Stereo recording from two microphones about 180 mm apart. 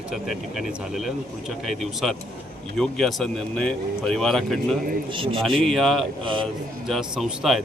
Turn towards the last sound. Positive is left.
turn(degrees=0)  # may be behind; listen again after turning